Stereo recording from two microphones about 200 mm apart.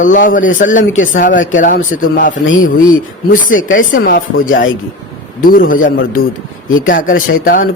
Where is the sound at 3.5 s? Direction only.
40° left (ahead or behind).